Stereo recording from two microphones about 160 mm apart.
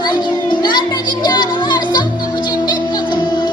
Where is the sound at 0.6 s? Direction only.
25° left (ahead or behind).